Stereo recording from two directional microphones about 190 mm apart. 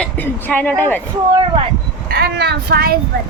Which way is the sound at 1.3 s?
25° right (ahead or behind).